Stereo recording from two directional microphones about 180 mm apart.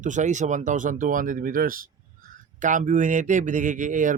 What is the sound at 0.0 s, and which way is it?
Speech, 45° right (ahead or behind).